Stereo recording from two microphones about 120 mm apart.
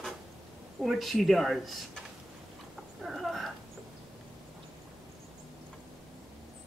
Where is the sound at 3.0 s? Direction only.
Centre (ahead or behind).